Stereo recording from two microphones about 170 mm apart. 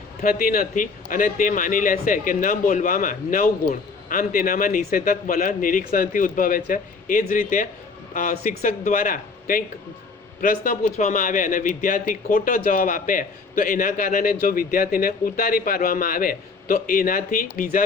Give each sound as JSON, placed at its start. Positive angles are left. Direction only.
{"t": 0.2, "sound": "a man's voice", "side_deg": 55}